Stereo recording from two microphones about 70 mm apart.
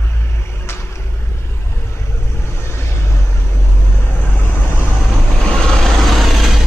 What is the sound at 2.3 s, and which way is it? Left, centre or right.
Vehicle, left.